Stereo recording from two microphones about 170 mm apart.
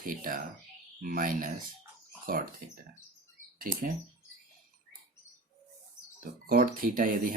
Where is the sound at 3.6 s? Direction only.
55° right (ahead or behind).